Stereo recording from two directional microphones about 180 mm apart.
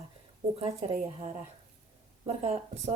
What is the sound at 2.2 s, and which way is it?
Speech, 35° right (ahead or behind).